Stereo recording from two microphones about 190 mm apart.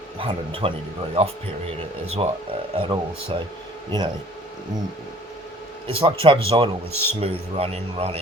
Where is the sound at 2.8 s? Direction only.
25° right (ahead or behind).